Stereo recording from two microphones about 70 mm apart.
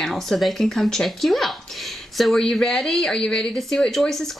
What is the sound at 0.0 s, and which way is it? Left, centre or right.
Speech, centre.